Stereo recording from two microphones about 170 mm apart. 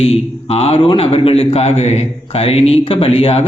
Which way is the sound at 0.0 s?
35° left (ahead or behind).